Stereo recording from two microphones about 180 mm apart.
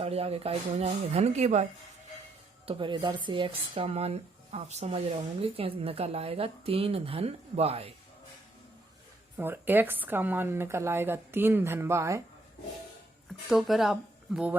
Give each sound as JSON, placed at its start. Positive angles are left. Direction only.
{"t": 0.0, "sound": "speech", "side_deg": -35}
{"t": 2.6, "sound": "speech", "side_deg": -30}
{"t": 9.4, "sound": "speech", "side_deg": -10}
{"t": 13.5, "sound": "speech", "side_deg": 0}